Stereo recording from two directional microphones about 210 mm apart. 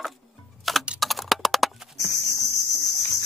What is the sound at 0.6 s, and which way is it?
Typing, centre (ahead or behind).